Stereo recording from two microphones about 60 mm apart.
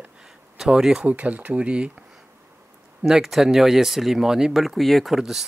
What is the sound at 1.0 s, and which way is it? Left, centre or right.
Speech, right.